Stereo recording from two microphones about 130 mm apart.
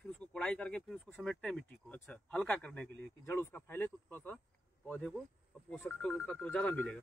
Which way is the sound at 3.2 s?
20° left (ahead or behind).